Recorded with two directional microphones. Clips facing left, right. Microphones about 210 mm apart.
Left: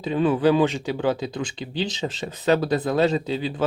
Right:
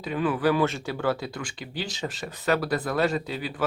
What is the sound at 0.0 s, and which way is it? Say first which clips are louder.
Speech: left 5 dB; 25° left (ahead or behind).